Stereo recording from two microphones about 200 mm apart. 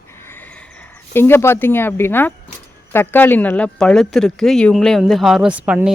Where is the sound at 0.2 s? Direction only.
10° left (ahead or behind).